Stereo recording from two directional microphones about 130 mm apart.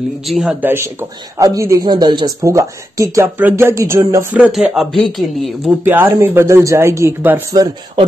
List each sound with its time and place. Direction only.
0.3 s speech: centre (ahead or behind)
0.6 s speech: 15° right (ahead or behind)
1.4 s speech: 25° right (ahead or behind)
4.5 s speech: 5° right (ahead or behind)
5.9 s speech: 15° right (ahead or behind)